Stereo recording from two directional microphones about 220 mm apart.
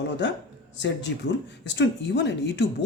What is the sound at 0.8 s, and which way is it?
Speech, 55° left (ahead or behind).